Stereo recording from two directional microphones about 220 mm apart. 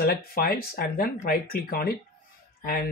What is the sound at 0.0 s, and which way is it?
Speech, 40° left (ahead or behind).